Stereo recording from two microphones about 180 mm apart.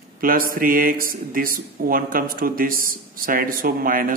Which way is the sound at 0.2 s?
50° right (ahead or behind).